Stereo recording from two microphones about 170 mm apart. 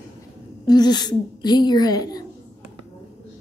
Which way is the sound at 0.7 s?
25° left (ahead or behind).